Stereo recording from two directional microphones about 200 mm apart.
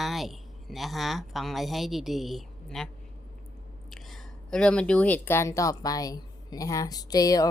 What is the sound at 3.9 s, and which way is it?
Speech, centre (ahead or behind).